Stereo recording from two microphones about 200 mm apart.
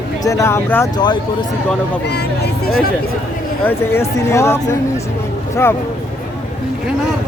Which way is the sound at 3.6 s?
15° left (ahead or behind).